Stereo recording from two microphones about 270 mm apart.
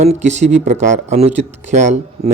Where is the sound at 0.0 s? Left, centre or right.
Right.